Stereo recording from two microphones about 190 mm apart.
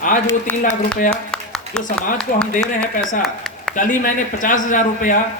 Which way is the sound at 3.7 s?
45° left (ahead or behind).